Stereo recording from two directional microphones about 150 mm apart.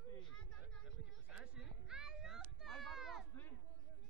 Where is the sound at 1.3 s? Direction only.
5° right (ahead or behind).